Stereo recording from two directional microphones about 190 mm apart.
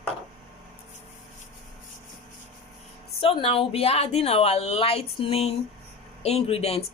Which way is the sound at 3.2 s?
30° left (ahead or behind).